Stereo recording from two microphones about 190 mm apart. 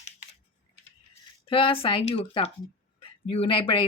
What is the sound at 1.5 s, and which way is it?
A woman's voice, 30° left (ahead or behind).